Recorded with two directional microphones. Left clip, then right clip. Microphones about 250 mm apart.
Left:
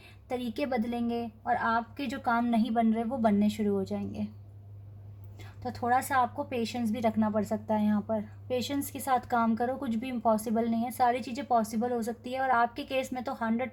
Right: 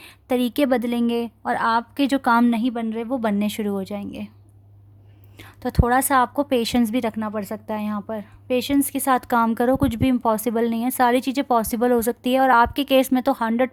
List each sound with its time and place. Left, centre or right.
0.3 s speech: right
5.7 s speech: right